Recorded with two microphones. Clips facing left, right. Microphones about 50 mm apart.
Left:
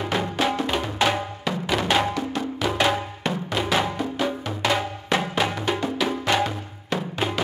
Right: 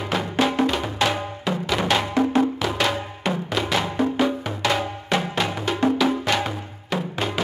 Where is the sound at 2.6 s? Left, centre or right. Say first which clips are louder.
Left 1 dB; centre.